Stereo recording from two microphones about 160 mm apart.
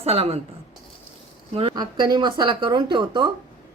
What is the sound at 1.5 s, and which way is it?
Speech, 30° right (ahead or behind).